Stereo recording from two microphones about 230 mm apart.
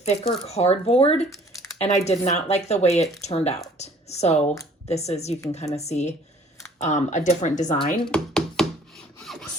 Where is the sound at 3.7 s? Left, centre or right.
Left.